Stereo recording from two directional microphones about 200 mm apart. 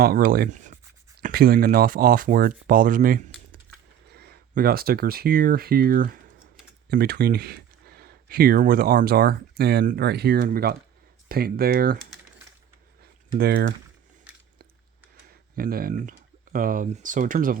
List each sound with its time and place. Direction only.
0.0 s speech: 45° right (ahead or behind)
13.0 s typing: 50° right (ahead or behind)
15.5 s speech: 50° right (ahead or behind)